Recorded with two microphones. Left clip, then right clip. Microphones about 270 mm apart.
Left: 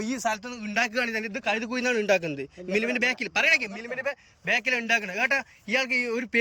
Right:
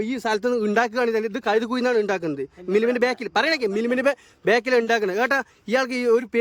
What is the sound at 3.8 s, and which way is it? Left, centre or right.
A man's voice, right.